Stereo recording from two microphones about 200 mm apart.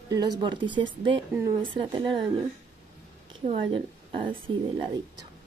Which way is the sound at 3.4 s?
25° right (ahead or behind).